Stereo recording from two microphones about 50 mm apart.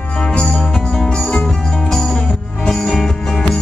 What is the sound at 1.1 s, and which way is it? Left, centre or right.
Music, centre.